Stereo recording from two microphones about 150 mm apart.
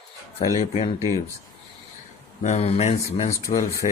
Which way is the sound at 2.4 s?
50° left (ahead or behind).